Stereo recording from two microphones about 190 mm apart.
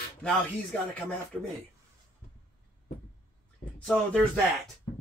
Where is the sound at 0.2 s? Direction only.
5° left (ahead or behind).